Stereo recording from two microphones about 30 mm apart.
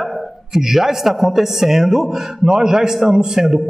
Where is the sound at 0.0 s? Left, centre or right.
Centre.